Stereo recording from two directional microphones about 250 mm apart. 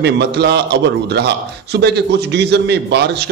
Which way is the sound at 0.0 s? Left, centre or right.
Right.